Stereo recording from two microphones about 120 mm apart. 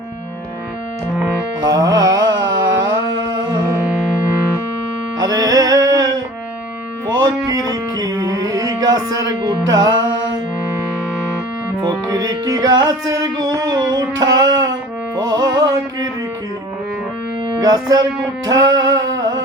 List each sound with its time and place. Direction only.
1.6 s mantra: 30° right (ahead or behind)
5.2 s music: 30° right (ahead or behind)
11.8 s music: 30° right (ahead or behind)
17.5 s music: 35° right (ahead or behind)
18.4 s a sound: 30° right (ahead or behind)